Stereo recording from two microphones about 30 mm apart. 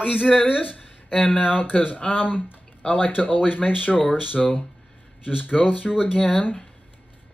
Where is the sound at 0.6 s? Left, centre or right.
Left.